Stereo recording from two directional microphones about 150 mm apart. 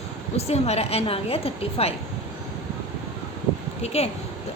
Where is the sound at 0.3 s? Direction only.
45° left (ahead or behind).